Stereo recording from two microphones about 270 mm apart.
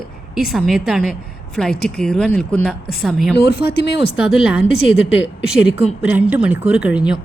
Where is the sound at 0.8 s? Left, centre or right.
Centre.